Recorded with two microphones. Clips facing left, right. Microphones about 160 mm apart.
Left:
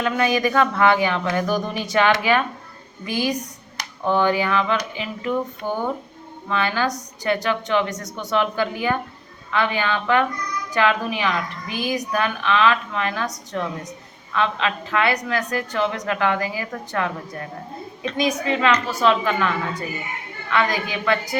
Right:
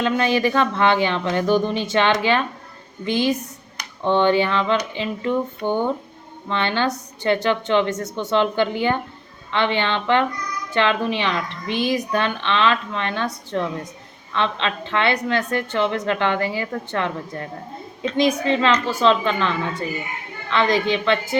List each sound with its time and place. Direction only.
0.0 s speech: 30° right (ahead or behind)
5.6 s speech: centre (ahead or behind)
6.5 s speech: 30° right (ahead or behind)